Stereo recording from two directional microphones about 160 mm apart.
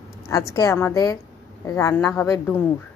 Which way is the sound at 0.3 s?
20° left (ahead or behind).